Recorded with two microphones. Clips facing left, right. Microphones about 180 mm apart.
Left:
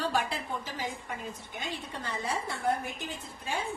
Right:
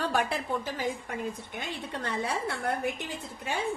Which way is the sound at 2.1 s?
65° right (ahead or behind).